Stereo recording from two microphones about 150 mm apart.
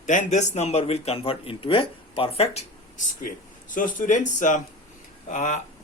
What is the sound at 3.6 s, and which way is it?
A man's voice, 65° left (ahead or behind).